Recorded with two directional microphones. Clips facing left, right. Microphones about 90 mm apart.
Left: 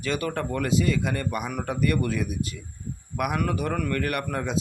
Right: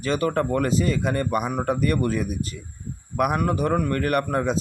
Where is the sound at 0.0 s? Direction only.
35° right (ahead or behind).